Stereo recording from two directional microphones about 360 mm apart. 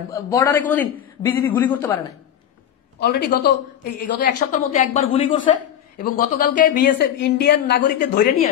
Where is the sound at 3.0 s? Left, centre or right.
Left.